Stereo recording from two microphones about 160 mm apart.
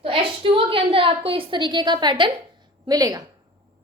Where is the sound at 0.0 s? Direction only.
35° right (ahead or behind).